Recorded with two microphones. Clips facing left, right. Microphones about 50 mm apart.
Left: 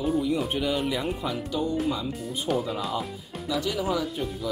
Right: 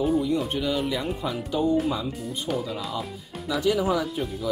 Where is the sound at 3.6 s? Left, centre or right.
Centre.